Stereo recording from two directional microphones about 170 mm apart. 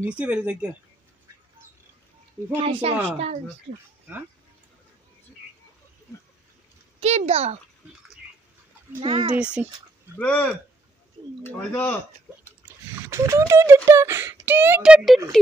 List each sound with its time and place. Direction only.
0.2 s speech: 5° right (ahead or behind)
2.6 s a child's voice: 30° right (ahead or behind)
7.0 s a child's voice: 40° right (ahead or behind)
9.0 s a child's voice: 30° right (ahead or behind)
9.4 s speech: 10° right (ahead or behind)
10.1 s speech: 10° left (ahead or behind)
12.6 s a sound: 15° right (ahead or behind)
13.8 s speech: 15° right (ahead or behind)